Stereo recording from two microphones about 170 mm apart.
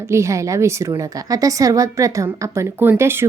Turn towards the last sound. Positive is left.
turn(degrees=-15)  # may be behind; listen again after turning